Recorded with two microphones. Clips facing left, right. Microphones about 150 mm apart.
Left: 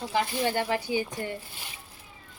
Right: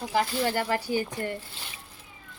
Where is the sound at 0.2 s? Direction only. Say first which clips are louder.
Right 1 dB; 20° left (ahead or behind).